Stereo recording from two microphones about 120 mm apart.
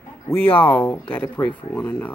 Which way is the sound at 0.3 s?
15° left (ahead or behind).